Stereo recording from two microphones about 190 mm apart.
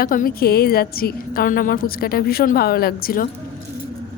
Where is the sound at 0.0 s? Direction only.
50° left (ahead or behind).